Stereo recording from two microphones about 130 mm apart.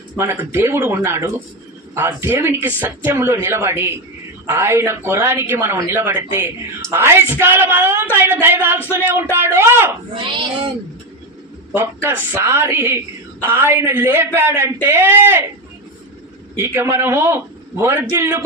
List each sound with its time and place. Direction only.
0.2 s speech: 20° right (ahead or behind)
10.2 s speech: 40° right (ahead or behind)
11.7 s speech: 15° right (ahead or behind)
16.6 s speech: 20° right (ahead or behind)